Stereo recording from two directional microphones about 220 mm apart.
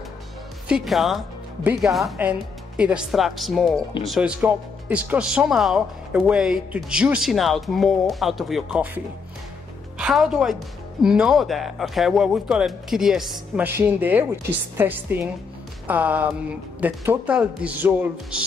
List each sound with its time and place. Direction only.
0.7 s speech: centre (ahead or behind)